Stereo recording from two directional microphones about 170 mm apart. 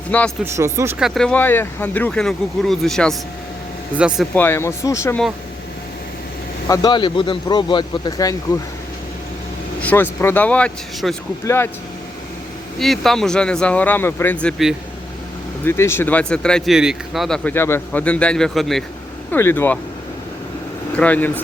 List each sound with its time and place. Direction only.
0.1 s speech: 10° left (ahead or behind)
0.5 s speech: 15° right (ahead or behind)
0.9 s speech: centre (ahead or behind)
4.4 s speech: 15° left (ahead or behind)
6.7 s a man's voice: 25° left (ahead or behind)
9.8 s speech: 10° left (ahead or behind)
12.8 s speech: centre (ahead or behind)
15.6 s speech: 15° left (ahead or behind)
19.3 s speech: 15° left (ahead or behind)
20.9 s speech: 10° left (ahead or behind)